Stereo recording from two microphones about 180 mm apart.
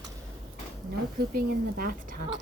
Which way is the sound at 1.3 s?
50° right (ahead or behind).